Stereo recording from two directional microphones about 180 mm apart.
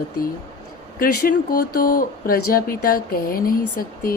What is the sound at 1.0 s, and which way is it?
Speech, 55° left (ahead or behind).